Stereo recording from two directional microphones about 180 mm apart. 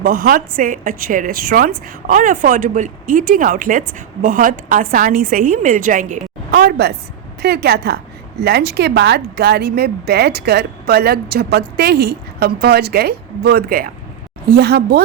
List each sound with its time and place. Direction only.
0.0 s speech: 55° right (ahead or behind)
6.5 s a woman's voice: 60° right (ahead or behind)